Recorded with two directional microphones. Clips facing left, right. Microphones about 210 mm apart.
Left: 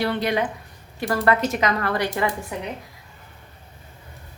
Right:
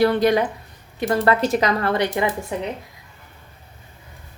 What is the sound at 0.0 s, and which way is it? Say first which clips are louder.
Speech: right 6 dB; 40° right (ahead or behind).